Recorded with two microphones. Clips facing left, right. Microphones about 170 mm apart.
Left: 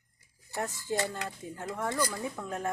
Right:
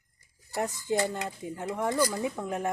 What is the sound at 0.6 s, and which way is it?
Speech, 15° right (ahead or behind).